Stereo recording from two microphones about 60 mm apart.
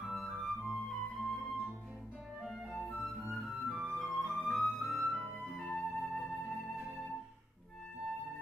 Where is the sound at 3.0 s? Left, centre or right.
Centre.